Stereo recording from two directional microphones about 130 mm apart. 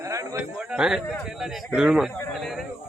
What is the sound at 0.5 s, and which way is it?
A man's voice, 5° right (ahead or behind).